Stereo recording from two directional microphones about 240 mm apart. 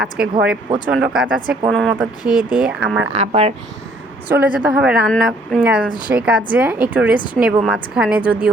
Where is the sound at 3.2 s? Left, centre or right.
Right.